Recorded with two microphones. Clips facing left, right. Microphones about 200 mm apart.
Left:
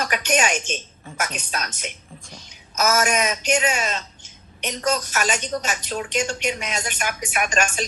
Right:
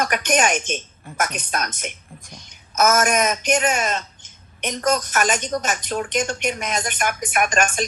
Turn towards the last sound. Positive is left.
turn(degrees=-55)  # may be behind; listen again after turning